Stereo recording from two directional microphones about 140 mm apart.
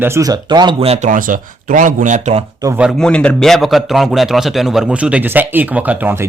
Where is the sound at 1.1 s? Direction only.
70° right (ahead or behind).